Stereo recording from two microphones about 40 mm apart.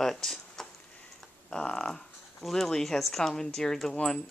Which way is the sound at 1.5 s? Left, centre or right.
Left.